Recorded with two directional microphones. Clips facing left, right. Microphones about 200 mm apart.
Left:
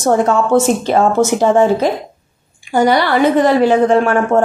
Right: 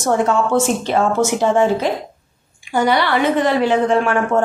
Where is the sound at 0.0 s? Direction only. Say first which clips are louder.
Left 3 dB; 40° left (ahead or behind).